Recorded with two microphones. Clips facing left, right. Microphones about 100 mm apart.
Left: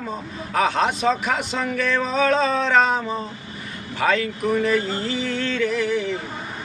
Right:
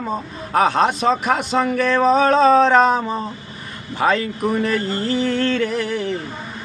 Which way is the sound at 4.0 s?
40° right (ahead or behind).